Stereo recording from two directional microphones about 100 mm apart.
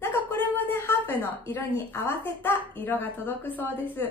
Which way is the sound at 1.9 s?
25° left (ahead or behind).